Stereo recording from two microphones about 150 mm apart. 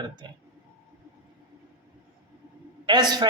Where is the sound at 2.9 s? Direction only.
30° right (ahead or behind).